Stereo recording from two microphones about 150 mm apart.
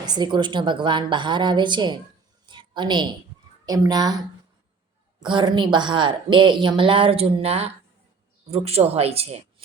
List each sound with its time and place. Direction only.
0.0 s speech: 30° right (ahead or behind)
2.5 s a sound: 30° right (ahead or behind)
3.7 s speech: 25° right (ahead or behind)
5.2 s speech: 30° right (ahead or behind)